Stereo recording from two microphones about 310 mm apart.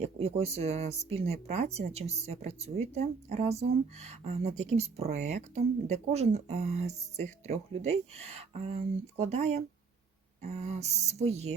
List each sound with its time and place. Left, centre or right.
0.0 s speech: right